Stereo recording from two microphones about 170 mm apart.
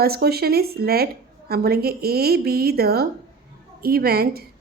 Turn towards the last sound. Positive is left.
turn(degrees=-65)  # may be behind; listen again after turning